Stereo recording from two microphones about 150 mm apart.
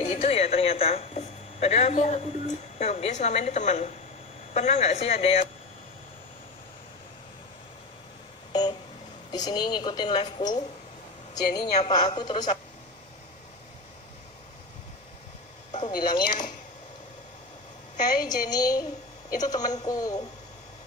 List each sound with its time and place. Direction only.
0.1 s a man's voice: 45° left (ahead or behind)
9.3 s a woman's voice: 30° left (ahead or behind)
15.8 s a woman's voice: 30° left (ahead or behind)
18.2 s a woman's voice: 25° left (ahead or behind)